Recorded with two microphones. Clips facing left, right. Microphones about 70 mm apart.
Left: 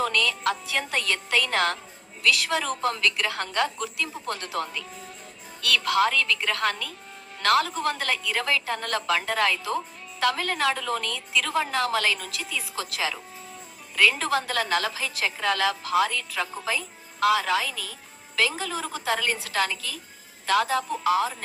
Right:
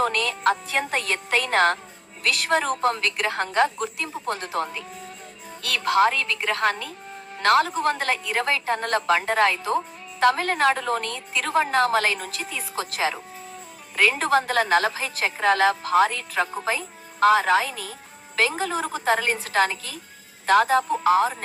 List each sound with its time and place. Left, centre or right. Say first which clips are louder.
0.0 s a woman's voice: right 3 dB; right